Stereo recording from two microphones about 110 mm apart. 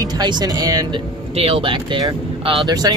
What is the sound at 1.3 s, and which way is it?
Speech, 65° right (ahead or behind).